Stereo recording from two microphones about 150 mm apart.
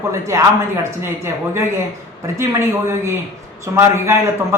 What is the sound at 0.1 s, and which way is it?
A man's voice, 20° right (ahead or behind).